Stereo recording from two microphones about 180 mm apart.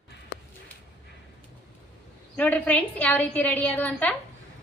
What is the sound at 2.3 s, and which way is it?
A woman's voice, 10° left (ahead or behind).